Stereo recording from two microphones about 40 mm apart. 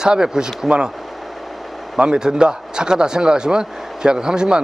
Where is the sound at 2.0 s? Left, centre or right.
Centre.